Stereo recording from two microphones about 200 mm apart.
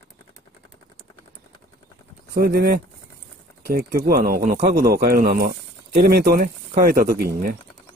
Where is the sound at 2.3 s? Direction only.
50° right (ahead or behind).